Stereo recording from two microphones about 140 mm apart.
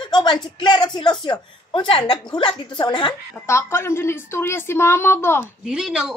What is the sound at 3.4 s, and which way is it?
A woman's voice, 20° left (ahead or behind).